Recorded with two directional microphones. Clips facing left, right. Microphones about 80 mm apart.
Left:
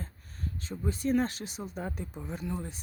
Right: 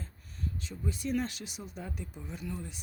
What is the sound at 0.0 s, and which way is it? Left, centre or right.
Speech, left.